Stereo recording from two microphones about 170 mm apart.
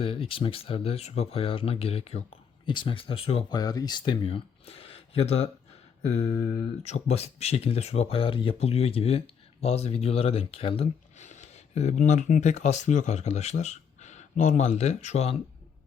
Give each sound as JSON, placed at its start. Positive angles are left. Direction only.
{"t": 0.0, "sound": "speech", "side_deg": 35}
{"t": 3.6, "sound": "speech", "side_deg": 20}
{"t": 6.8, "sound": "speech", "side_deg": 40}